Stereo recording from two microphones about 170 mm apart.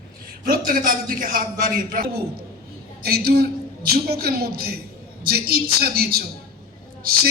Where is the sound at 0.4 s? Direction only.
55° right (ahead or behind).